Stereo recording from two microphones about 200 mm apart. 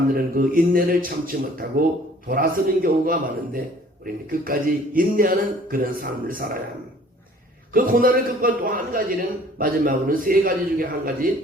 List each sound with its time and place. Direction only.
0.1 s a man's voice: 45° right (ahead or behind)
7.7 s a man's voice: 45° right (ahead or behind)